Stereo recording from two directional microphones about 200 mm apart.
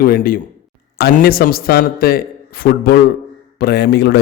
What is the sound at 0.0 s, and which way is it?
A man's voice, 45° left (ahead or behind).